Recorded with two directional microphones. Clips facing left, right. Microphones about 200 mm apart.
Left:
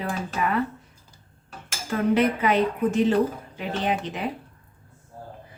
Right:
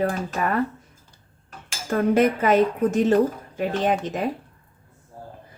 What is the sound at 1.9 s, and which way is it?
A woman's voice, 45° right (ahead or behind).